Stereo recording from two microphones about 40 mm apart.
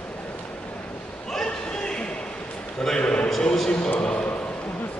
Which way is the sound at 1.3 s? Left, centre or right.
Centre.